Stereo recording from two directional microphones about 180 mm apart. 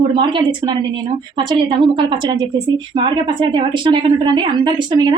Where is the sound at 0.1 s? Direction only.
25° right (ahead or behind).